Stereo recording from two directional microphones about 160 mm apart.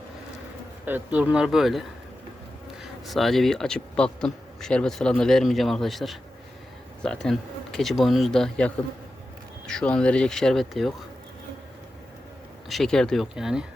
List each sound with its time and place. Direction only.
0.9 s speech: 10° right (ahead or behind)
3.1 s speech: centre (ahead or behind)
12.6 s speech: centre (ahead or behind)